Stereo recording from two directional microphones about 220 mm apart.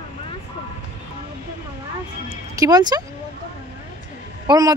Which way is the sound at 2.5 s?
15° right (ahead or behind).